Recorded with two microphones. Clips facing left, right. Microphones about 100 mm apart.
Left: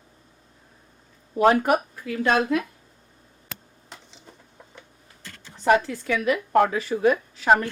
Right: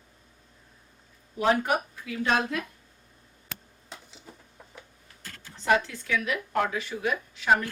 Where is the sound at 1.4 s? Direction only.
50° left (ahead or behind).